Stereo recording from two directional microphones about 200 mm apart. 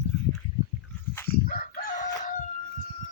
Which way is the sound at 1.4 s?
45° left (ahead or behind).